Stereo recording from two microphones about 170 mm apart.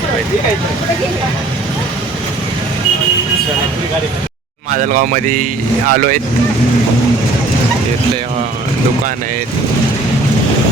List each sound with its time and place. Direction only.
4.7 s speech: 50° right (ahead or behind)